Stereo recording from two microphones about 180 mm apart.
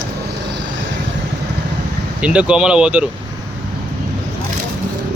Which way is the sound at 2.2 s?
5° right (ahead or behind).